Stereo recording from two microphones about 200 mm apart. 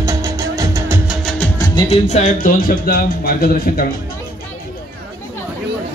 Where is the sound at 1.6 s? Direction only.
25° left (ahead or behind); by 3.8 s 50° left (ahead or behind).